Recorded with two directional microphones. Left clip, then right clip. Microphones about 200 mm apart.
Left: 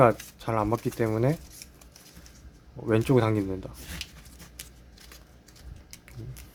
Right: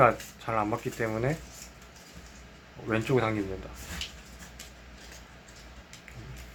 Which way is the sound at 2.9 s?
70° left (ahead or behind).